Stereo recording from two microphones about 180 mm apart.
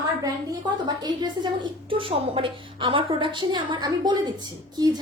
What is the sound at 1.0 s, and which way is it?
A woman's voice, 25° right (ahead or behind).